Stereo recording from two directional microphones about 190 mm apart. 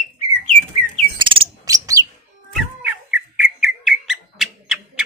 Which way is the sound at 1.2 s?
25° right (ahead or behind).